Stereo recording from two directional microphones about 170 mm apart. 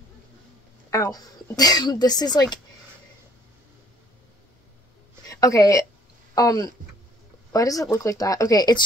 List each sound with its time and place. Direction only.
0.8 s speech: 20° left (ahead or behind)
5.2 s speech: 20° left (ahead or behind)